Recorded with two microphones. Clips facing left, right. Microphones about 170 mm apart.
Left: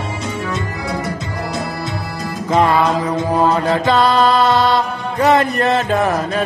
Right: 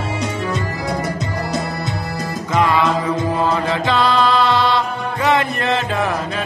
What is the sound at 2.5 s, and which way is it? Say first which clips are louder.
Music: left 2 dB; 35° left (ahead or behind).